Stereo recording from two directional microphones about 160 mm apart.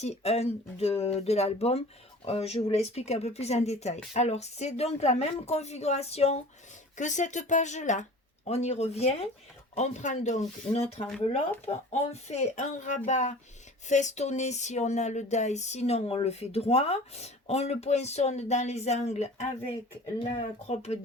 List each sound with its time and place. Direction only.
0.0 s speech: 40° left (ahead or behind)